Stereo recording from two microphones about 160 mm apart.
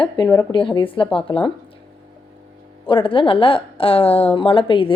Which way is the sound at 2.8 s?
30° left (ahead or behind).